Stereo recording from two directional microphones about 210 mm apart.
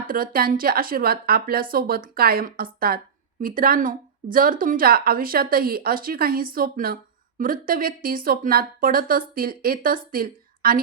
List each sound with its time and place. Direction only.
0.1 s speech: 45° right (ahead or behind)